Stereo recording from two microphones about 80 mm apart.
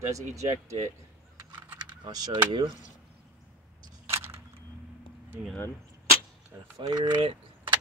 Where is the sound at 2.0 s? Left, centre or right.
Right.